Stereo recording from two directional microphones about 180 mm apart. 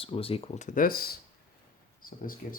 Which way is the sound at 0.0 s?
30° left (ahead or behind).